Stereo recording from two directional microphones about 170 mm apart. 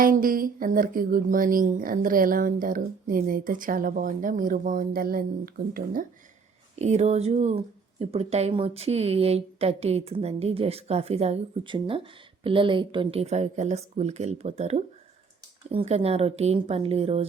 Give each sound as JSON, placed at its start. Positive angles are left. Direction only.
{"t": 0.0, "sound": "speech", "side_deg": -55}
{"t": 6.7, "sound": "speech", "side_deg": -40}